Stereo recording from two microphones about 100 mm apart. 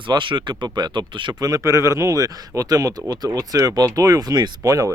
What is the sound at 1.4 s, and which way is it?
Speech, 35° right (ahead or behind).